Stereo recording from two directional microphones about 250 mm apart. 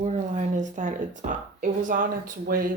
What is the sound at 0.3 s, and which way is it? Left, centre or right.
Speech, right.